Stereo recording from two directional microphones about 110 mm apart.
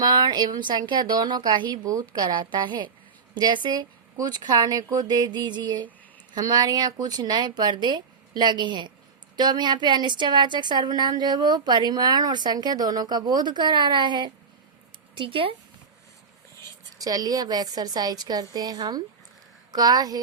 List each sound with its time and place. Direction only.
0.0 s a woman's voice: 40° right (ahead or behind)
16.6 s a woman's voice: 35° right (ahead or behind)